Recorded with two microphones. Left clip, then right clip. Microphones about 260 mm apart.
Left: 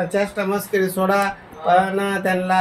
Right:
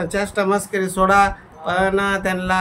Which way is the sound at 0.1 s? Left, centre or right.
Right.